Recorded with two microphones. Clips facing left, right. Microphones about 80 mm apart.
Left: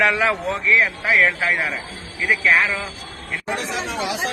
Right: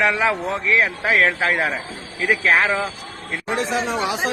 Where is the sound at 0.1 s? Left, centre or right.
Centre.